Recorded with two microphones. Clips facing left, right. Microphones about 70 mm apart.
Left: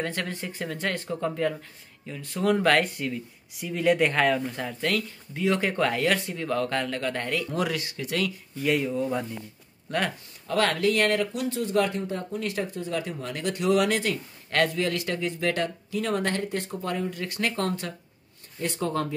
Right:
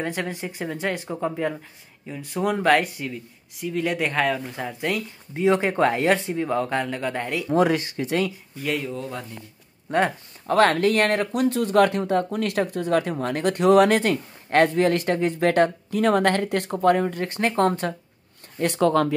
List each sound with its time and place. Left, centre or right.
0.0 s speech: centre
2.5 s speech: centre
4.6 s speech: centre
7.4 s speech: right
8.6 s speech: centre
9.8 s speech: right
10.4 s speech: right
14.5 s speech: right
17.2 s speech: right
18.6 s speech: right